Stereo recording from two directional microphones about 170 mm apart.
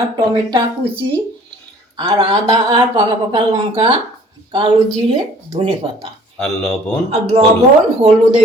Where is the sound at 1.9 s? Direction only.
25° right (ahead or behind).